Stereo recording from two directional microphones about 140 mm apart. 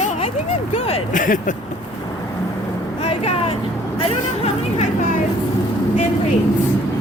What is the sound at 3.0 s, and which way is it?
Vehicle, 45° left (ahead or behind).